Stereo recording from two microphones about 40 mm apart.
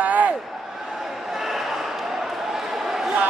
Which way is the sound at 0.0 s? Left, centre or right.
Right.